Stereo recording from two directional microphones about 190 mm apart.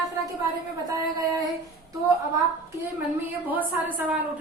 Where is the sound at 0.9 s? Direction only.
20° right (ahead or behind).